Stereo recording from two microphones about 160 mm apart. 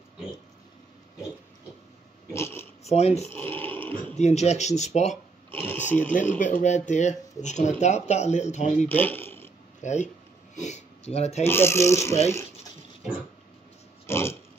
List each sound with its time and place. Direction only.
2.3 s oink: 15° left (ahead or behind)
2.9 s speech: 40° left (ahead or behind)
3.3 s snoring: 10° left (ahead or behind)
4.2 s speech: 45° left (ahead or behind)
5.5 s speech: 15° left (ahead or behind)
6.3 s speech: 55° left (ahead or behind)
8.8 s speech: 10° left (ahead or behind)
9.8 s speech: 50° left (ahead or behind)
11.4 s speech: 15° left (ahead or behind)
14.0 s pig: 15° left (ahead or behind)